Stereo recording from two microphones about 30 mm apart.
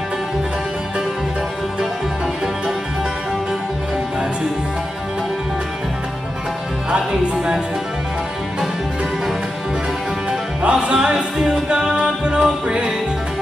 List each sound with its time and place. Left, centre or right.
6.9 s music: right
10.6 s music: right